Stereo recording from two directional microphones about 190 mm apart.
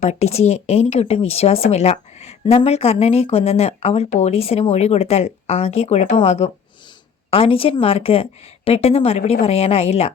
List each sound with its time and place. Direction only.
0.0 s speech: 35° left (ahead or behind)